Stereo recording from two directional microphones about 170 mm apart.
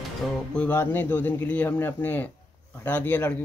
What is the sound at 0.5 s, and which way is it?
Speech, 10° left (ahead or behind).